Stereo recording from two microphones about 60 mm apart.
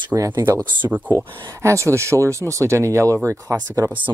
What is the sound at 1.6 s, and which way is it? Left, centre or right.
Speech, right.